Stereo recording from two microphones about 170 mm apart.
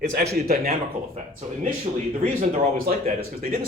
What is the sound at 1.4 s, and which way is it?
A man's voice, 45° right (ahead or behind).